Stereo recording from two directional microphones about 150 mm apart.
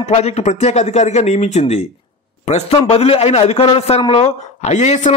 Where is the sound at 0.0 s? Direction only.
45° left (ahead or behind).